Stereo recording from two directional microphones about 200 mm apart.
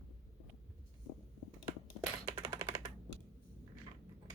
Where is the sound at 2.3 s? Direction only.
20° right (ahead or behind).